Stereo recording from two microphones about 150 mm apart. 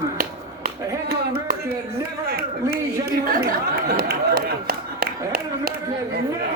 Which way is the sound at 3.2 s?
80° right.